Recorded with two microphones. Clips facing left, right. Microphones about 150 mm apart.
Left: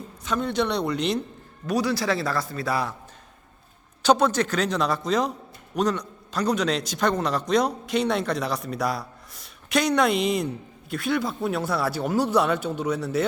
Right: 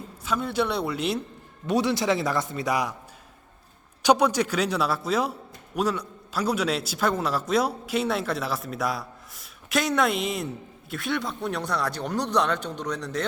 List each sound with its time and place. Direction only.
0.3 s a man's voice: 5° right (ahead or behind)
1.6 s speech: 25° right (ahead or behind)
4.0 s a man's voice: 10° right (ahead or behind); by 13.2 s 5° left (ahead or behind)